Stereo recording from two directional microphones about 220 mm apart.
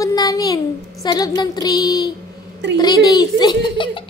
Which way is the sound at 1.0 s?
20° left (ahead or behind).